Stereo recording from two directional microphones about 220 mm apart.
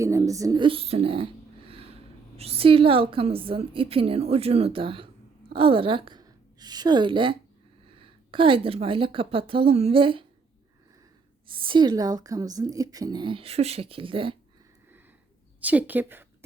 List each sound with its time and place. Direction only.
0.0 s a woman's voice: 15° right (ahead or behind)
11.4 s a woman's voice: 25° right (ahead or behind)
15.6 s a woman's voice: 5° right (ahead or behind)